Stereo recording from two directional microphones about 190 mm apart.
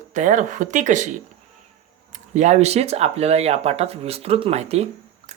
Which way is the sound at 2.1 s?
40° right (ahead or behind).